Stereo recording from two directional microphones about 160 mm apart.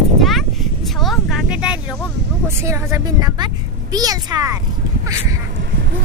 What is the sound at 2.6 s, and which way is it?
A woman's voice, 20° right (ahead or behind).